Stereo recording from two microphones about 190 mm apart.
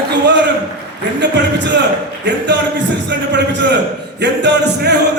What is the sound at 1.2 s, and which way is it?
Music, 70° right (ahead or behind).